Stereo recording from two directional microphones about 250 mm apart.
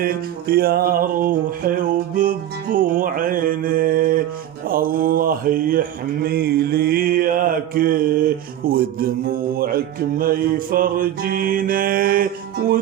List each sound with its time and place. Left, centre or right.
0.0 s music: right
6.2 s mantra: right
8.6 s speech: right
10.2 s music: right